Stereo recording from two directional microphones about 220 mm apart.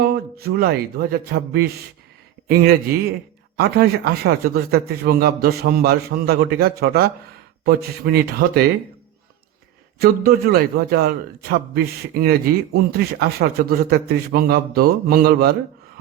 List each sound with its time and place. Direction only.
0.0 s speech: 45° right (ahead or behind)
3.6 s a man's voice: 45° right (ahead or behind)
10.0 s a man's voice: 45° right (ahead or behind)